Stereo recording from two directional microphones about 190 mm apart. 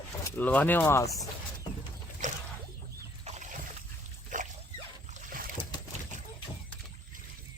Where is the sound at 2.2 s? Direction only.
40° right (ahead or behind).